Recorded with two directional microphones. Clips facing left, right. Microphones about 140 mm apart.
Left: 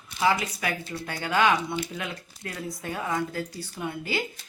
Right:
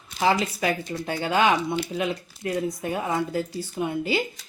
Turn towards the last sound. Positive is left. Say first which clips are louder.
# right 6 dB
turn(degrees=-20)  # may be behind; listen again after turning